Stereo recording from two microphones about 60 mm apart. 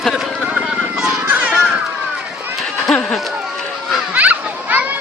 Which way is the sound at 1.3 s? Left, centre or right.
Right.